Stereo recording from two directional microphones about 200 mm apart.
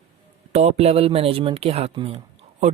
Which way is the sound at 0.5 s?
30° right (ahead or behind).